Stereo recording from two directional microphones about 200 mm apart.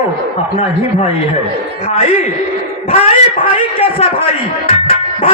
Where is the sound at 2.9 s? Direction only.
30° left (ahead or behind).